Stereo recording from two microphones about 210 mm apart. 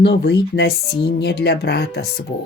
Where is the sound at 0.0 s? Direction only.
55° left (ahead or behind).